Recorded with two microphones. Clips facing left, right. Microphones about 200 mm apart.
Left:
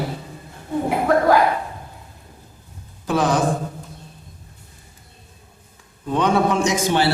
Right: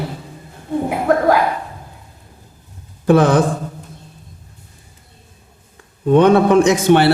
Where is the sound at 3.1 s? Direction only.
60° right (ahead or behind).